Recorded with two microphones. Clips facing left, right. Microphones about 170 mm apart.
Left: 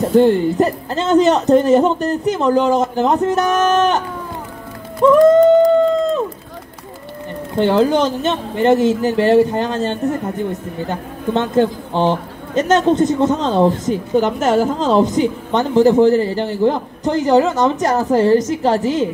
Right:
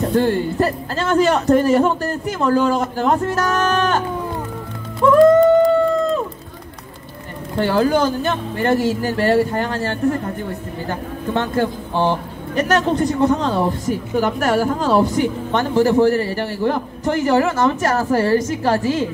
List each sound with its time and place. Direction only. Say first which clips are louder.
0.1 s a man's voice: left 9 dB; 20° left (ahead or behind)
5.0 s music: left 2 dB; 20° left (ahead or behind)
7.5 s a man's voice: left 3 dB; 20° left (ahead or behind)